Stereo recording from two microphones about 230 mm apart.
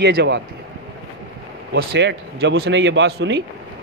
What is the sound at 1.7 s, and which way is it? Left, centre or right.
Speech, right.